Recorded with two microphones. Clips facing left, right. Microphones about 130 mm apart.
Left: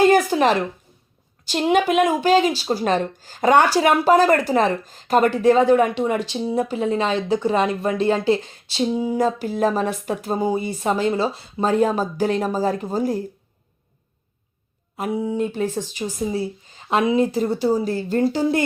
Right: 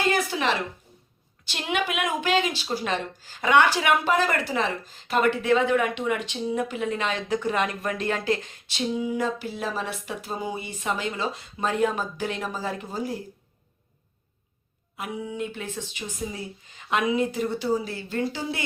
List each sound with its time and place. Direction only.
0.0 s a sound: 45° left (ahead or behind)
1.5 s a woman's voice: 40° left (ahead or behind)
14.9 s a woman's voice: 35° left (ahead or behind)